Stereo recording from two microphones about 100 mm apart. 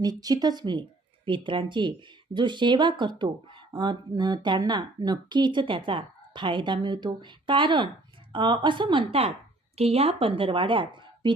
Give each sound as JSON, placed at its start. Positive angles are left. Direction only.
{"t": 0.0, "sound": "a woman's voice", "side_deg": -40}
{"t": 9.7, "sound": "a woman's voice", "side_deg": -90}